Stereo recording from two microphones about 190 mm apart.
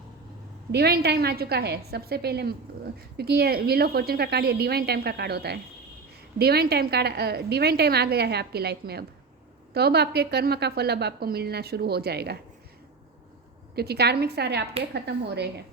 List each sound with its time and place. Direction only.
0.7 s a woman's voice: 60° right (ahead or behind)
13.7 s a woman's voice: 55° right (ahead or behind)